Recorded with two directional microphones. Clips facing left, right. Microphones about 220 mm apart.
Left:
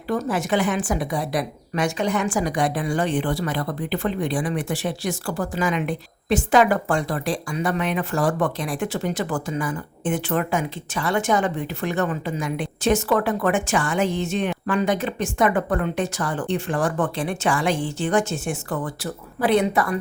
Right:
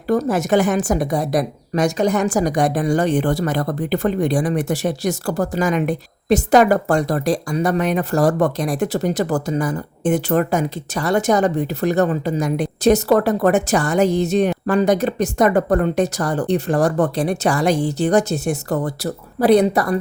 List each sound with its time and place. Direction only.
0.1 s a woman's voice: 40° right (ahead or behind)